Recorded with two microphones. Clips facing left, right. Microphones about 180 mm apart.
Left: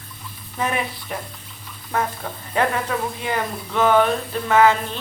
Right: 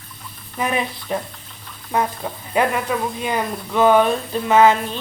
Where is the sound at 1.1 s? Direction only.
25° right (ahead or behind).